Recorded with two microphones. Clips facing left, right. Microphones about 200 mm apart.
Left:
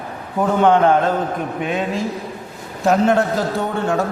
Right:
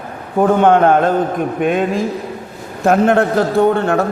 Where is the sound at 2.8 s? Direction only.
55° right (ahead or behind).